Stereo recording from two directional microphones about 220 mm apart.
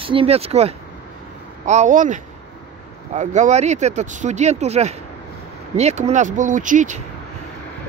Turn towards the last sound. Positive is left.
turn(degrees=-35)  # may be behind; listen again after turning